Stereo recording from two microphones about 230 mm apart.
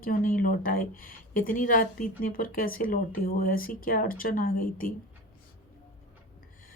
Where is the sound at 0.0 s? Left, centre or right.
Left.